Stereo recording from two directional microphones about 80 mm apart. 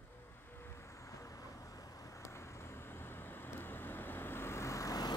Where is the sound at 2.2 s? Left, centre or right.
Left.